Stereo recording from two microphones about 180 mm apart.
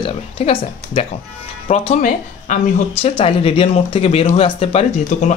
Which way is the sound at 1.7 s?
40° left (ahead or behind).